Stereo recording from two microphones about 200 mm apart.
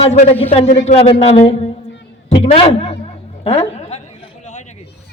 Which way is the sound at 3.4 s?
30° left (ahead or behind).